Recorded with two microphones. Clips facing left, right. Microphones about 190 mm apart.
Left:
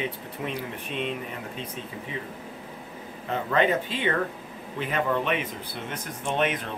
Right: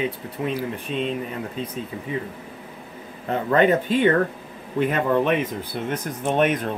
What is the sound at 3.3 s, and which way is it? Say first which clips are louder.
Speech: right 5 dB; 45° right (ahead or behind).